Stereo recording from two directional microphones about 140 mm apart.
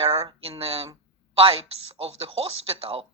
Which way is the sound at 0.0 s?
45° right (ahead or behind).